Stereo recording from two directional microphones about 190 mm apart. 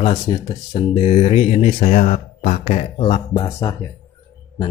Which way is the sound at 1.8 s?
40° left (ahead or behind).